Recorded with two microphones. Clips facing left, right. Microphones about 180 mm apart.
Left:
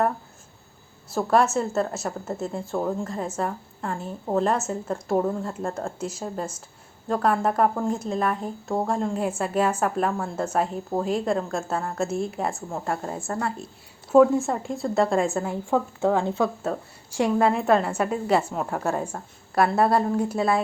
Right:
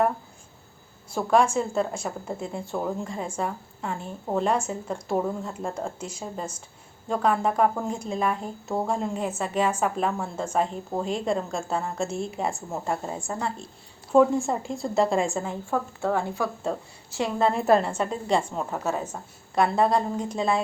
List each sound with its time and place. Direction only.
1.1 s speech: 5° left (ahead or behind)
15.7 s a woman's voice: 15° left (ahead or behind)
17.4 s a woman's voice: centre (ahead or behind)